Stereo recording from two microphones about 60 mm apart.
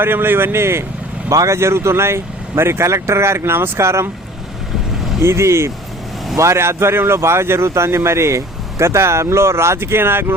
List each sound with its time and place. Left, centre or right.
0.0 s speech: right
1.3 s speech: right
1.5 s speech: right
5.2 s speech: right